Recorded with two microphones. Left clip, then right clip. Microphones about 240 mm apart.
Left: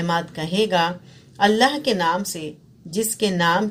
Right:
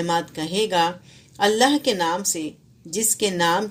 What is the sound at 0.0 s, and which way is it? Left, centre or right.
Speech, right.